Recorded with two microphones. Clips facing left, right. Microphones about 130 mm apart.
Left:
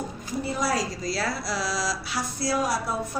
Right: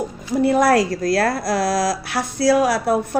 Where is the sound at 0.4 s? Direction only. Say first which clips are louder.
Right 12 dB; 65° right (ahead or behind).